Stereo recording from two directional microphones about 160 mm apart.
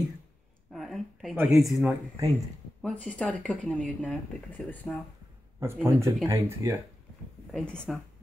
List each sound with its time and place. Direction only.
0.7 s a sound: centre (ahead or behind)
1.3 s speech: 15° right (ahead or behind)
1.6 s speech: centre (ahead or behind)
5.6 s speech: 20° right (ahead or behind)
7.5 s speech: 5° left (ahead or behind)